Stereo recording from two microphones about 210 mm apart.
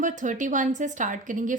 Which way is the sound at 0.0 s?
35° right (ahead or behind).